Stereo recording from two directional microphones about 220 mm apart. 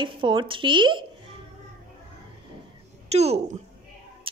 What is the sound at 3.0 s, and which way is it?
Speech, 30° right (ahead or behind).